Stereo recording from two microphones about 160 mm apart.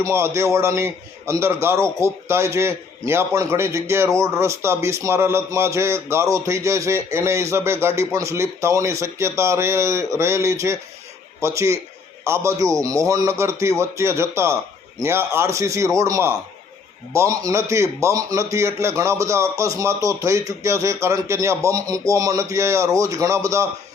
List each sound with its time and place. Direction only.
0.0 s a man's voice: 15° right (ahead or behind)